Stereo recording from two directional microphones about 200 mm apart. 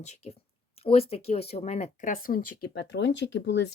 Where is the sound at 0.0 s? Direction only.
35° left (ahead or behind).